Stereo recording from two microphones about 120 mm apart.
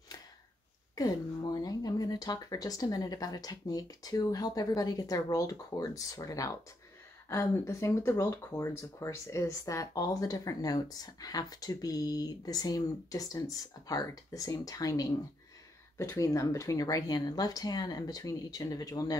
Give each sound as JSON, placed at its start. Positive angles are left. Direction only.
{"t": 0.9, "sound": "speech", "side_deg": 30}